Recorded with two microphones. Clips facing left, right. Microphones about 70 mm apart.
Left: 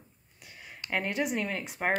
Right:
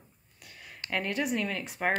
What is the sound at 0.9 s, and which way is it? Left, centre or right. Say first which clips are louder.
Speech: even; centre.